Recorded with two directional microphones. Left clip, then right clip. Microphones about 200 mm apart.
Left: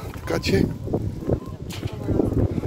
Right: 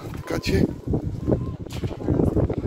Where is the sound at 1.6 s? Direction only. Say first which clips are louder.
Even; 55° left (ahead or behind).